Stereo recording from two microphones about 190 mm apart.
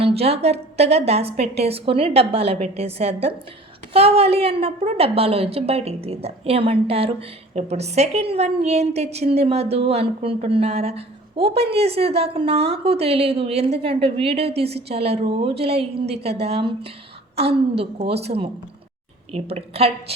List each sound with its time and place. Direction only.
0.0 s a woman's voice: 30° right (ahead or behind)